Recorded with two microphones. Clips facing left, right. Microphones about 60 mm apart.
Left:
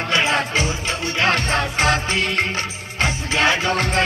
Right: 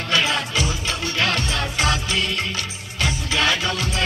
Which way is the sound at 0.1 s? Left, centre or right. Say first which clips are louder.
Left 2 dB; left.